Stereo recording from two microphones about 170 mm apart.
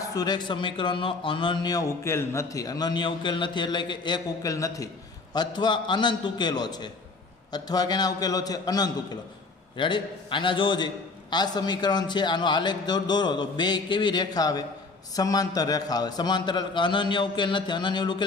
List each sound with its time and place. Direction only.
0.1 s a man's voice: 25° left (ahead or behind)